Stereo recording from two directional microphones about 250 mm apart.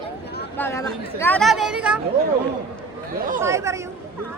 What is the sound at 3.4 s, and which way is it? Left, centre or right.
Speech, centre.